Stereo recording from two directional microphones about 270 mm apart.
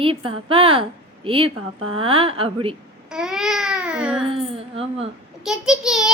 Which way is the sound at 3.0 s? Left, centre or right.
Centre.